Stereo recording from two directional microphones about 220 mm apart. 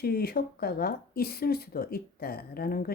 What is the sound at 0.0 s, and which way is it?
A woman's voice, 45° left (ahead or behind).